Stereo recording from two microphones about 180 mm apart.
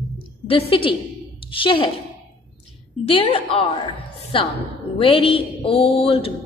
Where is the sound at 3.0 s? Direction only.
30° left (ahead or behind).